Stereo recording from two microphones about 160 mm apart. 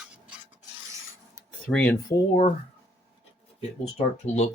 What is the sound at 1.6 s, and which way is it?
Speech, 10° left (ahead or behind).